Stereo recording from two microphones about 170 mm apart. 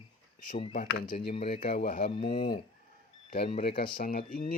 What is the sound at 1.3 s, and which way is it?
Speech, 55° left (ahead or behind).